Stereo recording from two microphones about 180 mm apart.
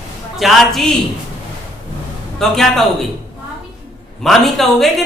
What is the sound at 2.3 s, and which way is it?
Speech, centre (ahead or behind).